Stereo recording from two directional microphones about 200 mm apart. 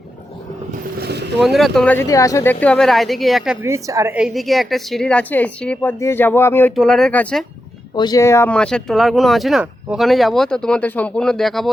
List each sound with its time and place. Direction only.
0.9 s vehicle: 55° right (ahead or behind)
1.4 s speech: centre (ahead or behind)
3.7 s speech: 15° right (ahead or behind); by 7.4 s 5° left (ahead or behind)
7.9 s speech: 20° left (ahead or behind); by 11.7 s centre (ahead or behind)